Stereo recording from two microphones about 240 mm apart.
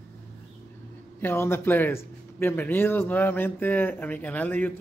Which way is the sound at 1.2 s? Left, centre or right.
Centre.